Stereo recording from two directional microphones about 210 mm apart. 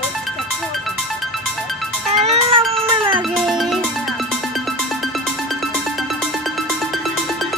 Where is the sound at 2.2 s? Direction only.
25° right (ahead or behind).